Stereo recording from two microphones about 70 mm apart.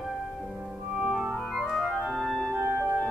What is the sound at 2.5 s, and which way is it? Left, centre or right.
Music, right.